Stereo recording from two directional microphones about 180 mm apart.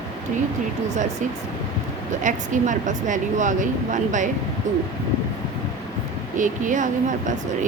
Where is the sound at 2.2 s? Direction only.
45° right (ahead or behind).